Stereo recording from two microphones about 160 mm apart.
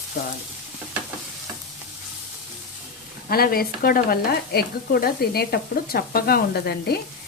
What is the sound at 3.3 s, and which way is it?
Speech, 70° left (ahead or behind).